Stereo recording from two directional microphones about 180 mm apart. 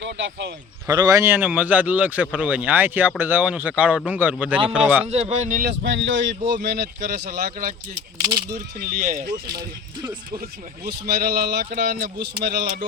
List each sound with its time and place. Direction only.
0.0 s speech: 80° right
0.9 s speech: 20° right (ahead or behind)
5.0 s speech: 40° right (ahead or behind)
5.6 s speech: 90° right
6.6 s speech: 60° right (ahead or behind)
9.5 s speech: 25° right (ahead or behind)
10.8 s speech: 60° right (ahead or behind)